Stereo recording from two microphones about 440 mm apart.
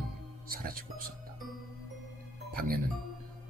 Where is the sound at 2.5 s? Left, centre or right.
Centre.